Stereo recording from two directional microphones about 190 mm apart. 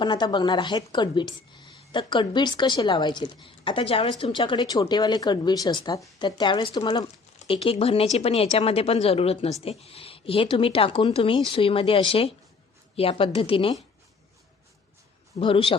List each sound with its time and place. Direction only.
0.0 s a woman's voice: 25° left (ahead or behind)
15.4 s a woman's voice: 30° left (ahead or behind)